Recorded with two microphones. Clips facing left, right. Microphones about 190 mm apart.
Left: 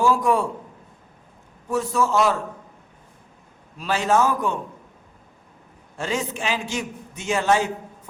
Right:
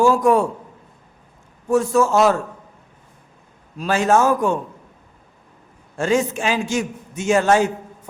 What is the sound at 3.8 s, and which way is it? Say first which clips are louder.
Speech: right 4 dB; 45° right (ahead or behind).